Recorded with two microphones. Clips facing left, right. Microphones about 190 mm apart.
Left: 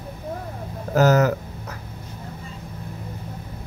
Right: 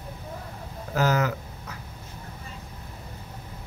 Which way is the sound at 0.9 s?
45° left (ahead or behind).